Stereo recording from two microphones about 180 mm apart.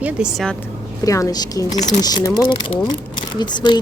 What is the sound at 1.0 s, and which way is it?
Speech, 20° left (ahead or behind).